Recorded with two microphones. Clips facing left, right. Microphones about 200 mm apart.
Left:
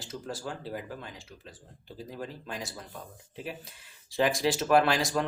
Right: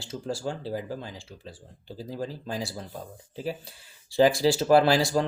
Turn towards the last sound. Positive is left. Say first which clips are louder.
# right 4 dB
turn(degrees=-30)  # may be behind; listen again after turning